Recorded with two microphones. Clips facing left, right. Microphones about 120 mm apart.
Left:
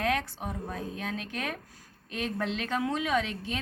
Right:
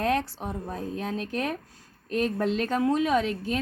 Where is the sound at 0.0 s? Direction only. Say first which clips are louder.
Right 4 dB; 35° right (ahead or behind).